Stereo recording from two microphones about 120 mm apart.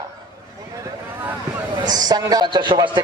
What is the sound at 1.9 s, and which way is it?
A man's voice, 35° right (ahead or behind).